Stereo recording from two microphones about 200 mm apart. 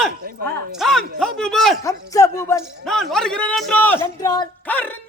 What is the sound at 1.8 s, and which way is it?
Speech, 15° left (ahead or behind).